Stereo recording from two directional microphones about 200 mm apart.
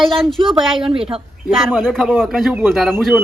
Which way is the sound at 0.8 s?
25° right (ahead or behind).